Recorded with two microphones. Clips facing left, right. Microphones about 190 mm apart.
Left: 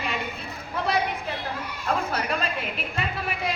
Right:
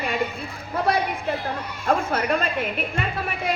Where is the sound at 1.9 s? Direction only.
50° right (ahead or behind).